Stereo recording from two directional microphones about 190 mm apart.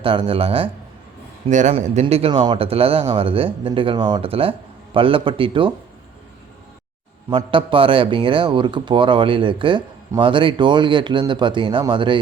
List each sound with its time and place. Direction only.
0.0 s a man's voice: 30° right (ahead or behind)
7.3 s a man's voice: 25° right (ahead or behind)